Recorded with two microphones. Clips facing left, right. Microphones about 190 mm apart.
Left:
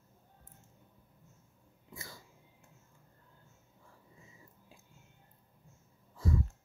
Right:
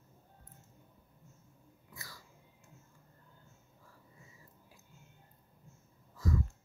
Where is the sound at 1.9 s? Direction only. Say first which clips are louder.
Left 4 dB; 25° left (ahead or behind).